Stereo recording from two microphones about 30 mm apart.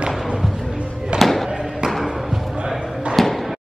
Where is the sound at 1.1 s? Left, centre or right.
Right.